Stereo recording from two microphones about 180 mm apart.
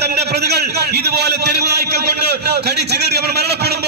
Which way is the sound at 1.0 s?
65° right (ahead or behind).